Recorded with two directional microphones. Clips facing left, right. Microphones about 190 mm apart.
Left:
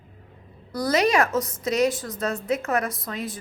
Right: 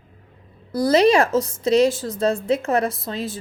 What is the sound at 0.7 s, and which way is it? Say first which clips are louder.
A woman's voice: right 5 dB; 30° right (ahead or behind).